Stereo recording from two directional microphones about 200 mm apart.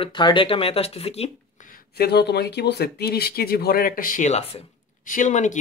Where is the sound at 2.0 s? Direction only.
55° left (ahead or behind).